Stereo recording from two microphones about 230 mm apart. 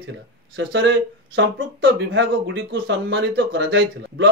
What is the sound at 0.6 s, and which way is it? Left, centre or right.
Speech, right.